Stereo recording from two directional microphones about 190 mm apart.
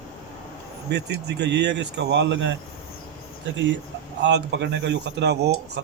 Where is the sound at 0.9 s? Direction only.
60° right (ahead or behind).